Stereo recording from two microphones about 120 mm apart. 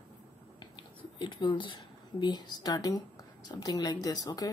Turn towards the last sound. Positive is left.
turn(degrees=30)  # may be behind; listen again after turning